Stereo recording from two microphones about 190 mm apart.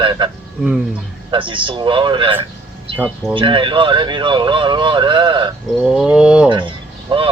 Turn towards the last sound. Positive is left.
turn(degrees=-25)  # may be behind; listen again after turning